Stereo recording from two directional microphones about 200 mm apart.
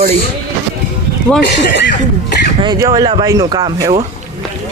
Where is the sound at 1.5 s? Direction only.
60° left (ahead or behind).